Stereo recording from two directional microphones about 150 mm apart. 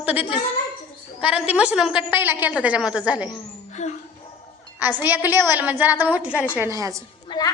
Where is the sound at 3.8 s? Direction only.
50° left (ahead or behind).